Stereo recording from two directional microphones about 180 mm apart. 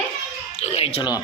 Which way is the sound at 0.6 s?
35° left (ahead or behind).